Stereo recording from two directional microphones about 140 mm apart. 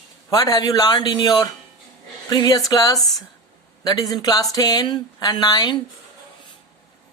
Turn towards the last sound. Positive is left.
turn(degrees=30)  # may be behind; listen again after turning